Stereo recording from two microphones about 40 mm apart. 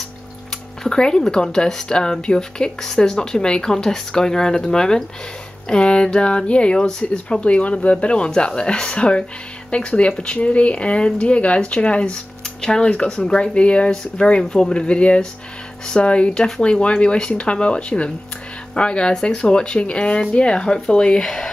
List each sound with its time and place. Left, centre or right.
0.8 s a woman's voice: left
12.6 s speech: centre